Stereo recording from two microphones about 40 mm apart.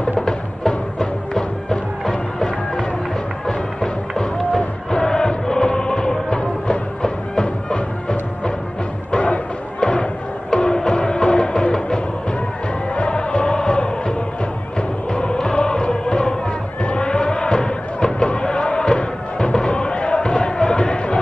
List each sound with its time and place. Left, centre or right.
0.2 s music: centre
4.2 s music: centre; by 9.4 s left
9.8 s thump: left
10.5 s music: centre
15.1 s music: left
16.8 s a sound: left
18.0 s music: left